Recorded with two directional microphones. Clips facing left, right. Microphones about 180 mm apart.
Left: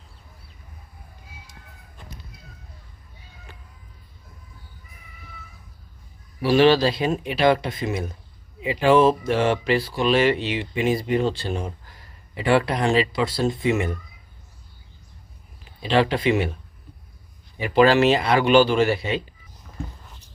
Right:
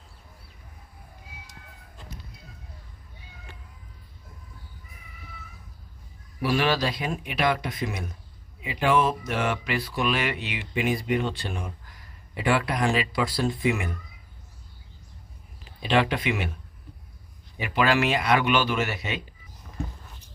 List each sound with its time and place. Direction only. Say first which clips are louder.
6.4 s speech: left 8 dB; 25° left (ahead or behind)
16.0 s speech: left 5 dB; 30° left (ahead or behind)
17.7 s speech: left 7 dB; 30° left (ahead or behind)